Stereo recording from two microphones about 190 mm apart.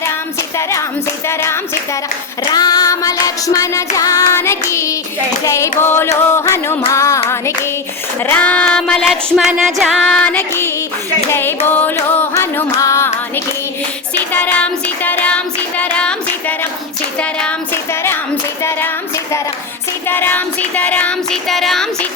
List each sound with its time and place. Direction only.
0.0 s music: 15° left (ahead or behind)
11.3 s carnatic music: 10° left (ahead or behind)
14.3 s child singing: 10° left (ahead or behind)
17.2 s a sound: 5° left (ahead or behind)
18.6 s music: 10° left (ahead or behind)